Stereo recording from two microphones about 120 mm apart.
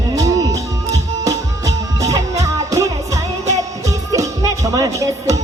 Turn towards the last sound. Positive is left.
turn(degrees=-25)  # may be behind; listen again after turning